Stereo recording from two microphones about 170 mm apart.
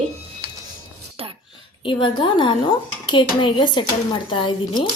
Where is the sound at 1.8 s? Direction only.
30° left (ahead or behind).